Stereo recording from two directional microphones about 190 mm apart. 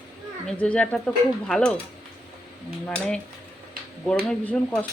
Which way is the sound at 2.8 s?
5° left (ahead or behind).